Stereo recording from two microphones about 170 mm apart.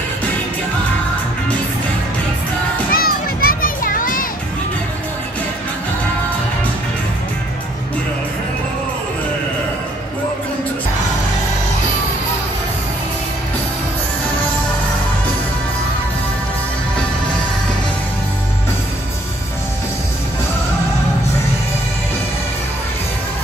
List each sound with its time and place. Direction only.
2.9 s children playing: 60° left (ahead or behind)